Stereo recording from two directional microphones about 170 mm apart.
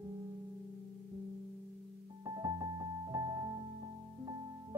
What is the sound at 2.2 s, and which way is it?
Music, 20° right (ahead or behind).